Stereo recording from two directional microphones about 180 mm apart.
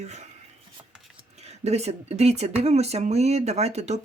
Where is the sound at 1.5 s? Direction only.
35° right (ahead or behind).